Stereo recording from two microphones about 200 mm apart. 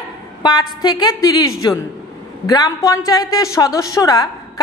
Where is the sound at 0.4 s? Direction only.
20° left (ahead or behind).